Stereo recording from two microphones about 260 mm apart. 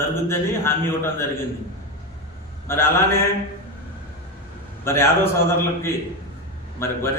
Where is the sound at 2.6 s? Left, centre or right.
Centre.